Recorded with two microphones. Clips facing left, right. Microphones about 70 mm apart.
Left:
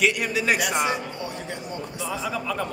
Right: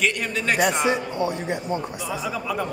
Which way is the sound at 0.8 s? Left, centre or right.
Right.